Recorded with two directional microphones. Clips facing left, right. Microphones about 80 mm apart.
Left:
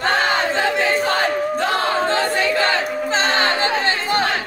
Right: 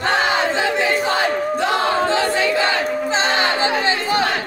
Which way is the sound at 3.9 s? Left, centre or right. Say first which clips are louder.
Right 1 dB; left.